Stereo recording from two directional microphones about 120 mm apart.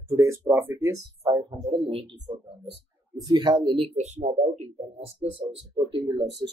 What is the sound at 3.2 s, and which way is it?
Speech, 35° right (ahead or behind).